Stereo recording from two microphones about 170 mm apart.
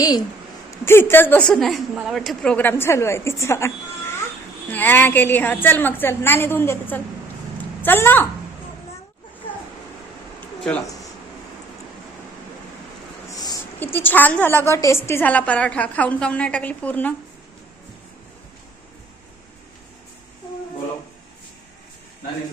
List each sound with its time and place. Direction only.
0.9 s a woman's voice: 15° left (ahead or behind)
10.6 s speech: 5° left (ahead or behind)
13.3 s a sound: 25° left (ahead or behind)
13.7 s a woman's voice: 10° left (ahead or behind)